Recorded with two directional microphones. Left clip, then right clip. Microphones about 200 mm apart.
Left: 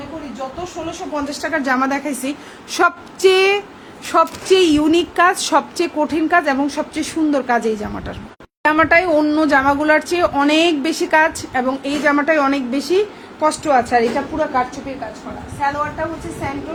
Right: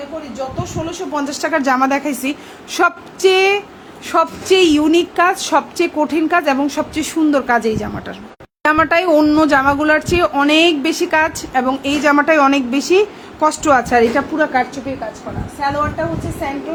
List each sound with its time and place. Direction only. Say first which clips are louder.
1.1 s a woman's voice: right 3 dB; 30° right (ahead or behind)
2.7 s female singing: right 1 dB; centre (ahead or behind)
4.1 s speech: even; 5° right (ahead or behind)
13.5 s a woman's voice: right 1 dB; 25° right (ahead or behind)